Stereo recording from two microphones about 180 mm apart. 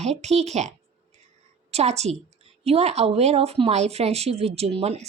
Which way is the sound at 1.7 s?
35° right (ahead or behind).